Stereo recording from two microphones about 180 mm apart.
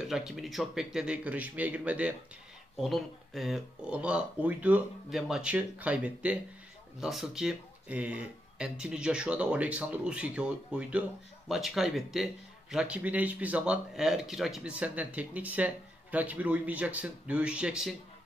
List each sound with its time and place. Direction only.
0.0 s speech: centre (ahead or behind)